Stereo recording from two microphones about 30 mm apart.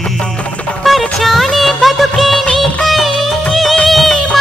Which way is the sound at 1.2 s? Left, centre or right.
Centre.